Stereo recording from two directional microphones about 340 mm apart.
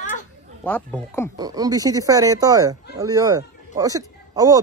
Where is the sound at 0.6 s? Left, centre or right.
Centre.